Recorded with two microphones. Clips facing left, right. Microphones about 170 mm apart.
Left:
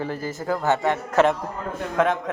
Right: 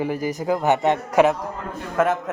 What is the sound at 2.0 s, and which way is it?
Speech, 5° right (ahead or behind).